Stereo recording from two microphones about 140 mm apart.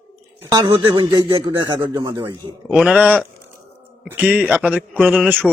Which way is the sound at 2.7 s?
5° right (ahead or behind).